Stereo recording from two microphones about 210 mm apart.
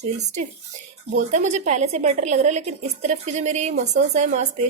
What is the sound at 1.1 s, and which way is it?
Speech, 35° right (ahead or behind).